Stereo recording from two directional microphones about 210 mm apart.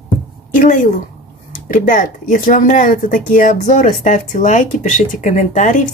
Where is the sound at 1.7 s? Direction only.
40° left (ahead or behind).